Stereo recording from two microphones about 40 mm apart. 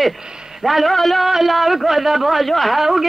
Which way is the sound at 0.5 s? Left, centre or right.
Centre.